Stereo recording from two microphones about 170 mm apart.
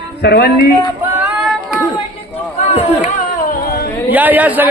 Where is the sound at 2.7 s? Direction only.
40° left (ahead or behind).